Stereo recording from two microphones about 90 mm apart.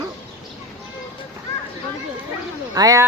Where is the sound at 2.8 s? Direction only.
40° right (ahead or behind).